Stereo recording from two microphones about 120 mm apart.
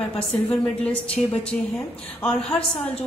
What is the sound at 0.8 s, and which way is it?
A woman's voice, 10° left (ahead or behind).